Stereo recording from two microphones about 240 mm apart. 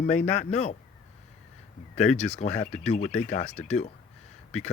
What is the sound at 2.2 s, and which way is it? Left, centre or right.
Speech, left.